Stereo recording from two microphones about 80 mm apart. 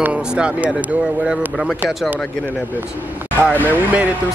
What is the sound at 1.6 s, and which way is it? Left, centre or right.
Speech, centre.